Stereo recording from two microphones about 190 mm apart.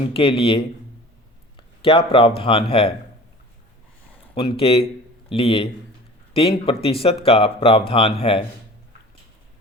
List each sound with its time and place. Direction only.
0.0 s speech: 30° left (ahead or behind)
4.4 s speech: 30° left (ahead or behind)